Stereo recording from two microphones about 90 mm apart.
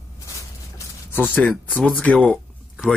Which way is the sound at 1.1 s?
20° left (ahead or behind).